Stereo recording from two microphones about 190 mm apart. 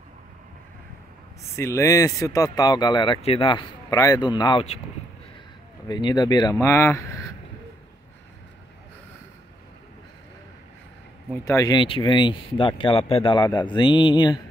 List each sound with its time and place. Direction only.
1.6 s speech: 15° left (ahead or behind)
5.9 s speech: 25° left (ahead or behind)
11.4 s speech: 20° left (ahead or behind)